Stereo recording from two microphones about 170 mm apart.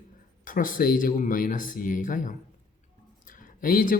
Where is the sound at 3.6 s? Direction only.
55° left (ahead or behind).